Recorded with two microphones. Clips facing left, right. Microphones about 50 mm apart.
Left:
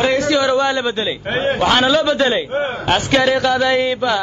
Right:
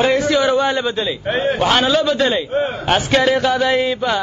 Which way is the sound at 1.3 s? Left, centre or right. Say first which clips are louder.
Even; left.